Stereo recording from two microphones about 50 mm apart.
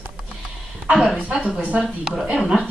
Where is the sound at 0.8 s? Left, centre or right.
Centre.